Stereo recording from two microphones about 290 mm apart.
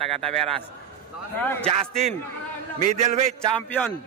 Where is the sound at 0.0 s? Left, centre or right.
Centre.